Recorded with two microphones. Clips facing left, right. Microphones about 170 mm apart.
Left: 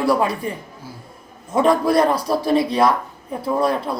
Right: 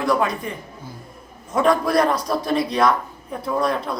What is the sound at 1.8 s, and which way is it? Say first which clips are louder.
A man's voice: left 2 dB; 25° left (ahead or behind).